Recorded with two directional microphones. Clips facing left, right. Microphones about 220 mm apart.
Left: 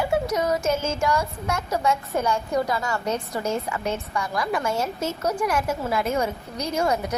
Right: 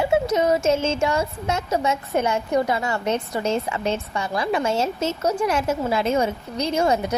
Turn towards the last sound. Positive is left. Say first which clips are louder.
# right 3 dB
turn(degrees=-25)  # may be behind; listen again after turning